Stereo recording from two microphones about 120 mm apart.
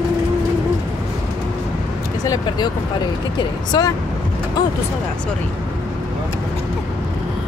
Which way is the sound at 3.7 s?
35° left (ahead or behind).